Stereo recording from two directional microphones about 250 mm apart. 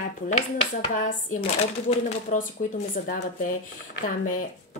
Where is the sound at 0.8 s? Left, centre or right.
Left.